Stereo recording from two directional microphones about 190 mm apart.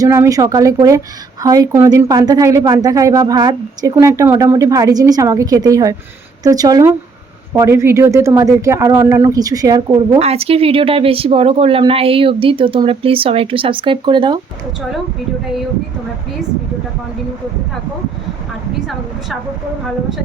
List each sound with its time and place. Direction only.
0.0 s a woman's voice: 15° right (ahead or behind)
10.2 s a woman's voice: 35° right (ahead or behind)